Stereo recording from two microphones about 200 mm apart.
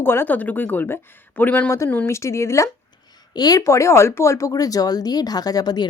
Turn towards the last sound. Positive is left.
turn(degrees=20)  # may be behind; listen again after turning